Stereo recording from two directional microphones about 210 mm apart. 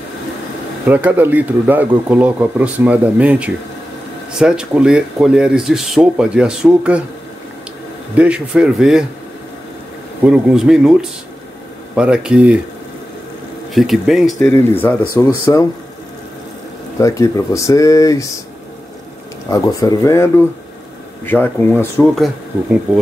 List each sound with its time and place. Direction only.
0.8 s speech: 10° right (ahead or behind)
8.1 s speech: 5° right (ahead or behind)
10.2 s speech: 5° right (ahead or behind)
13.7 s speech: centre (ahead or behind); by 15.6 s 15° left (ahead or behind)
17.0 s speech: 15° left (ahead or behind)
19.5 s speech: 15° left (ahead or behind)